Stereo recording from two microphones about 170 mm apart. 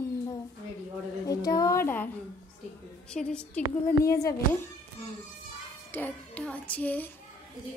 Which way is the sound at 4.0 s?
20° left (ahead or behind).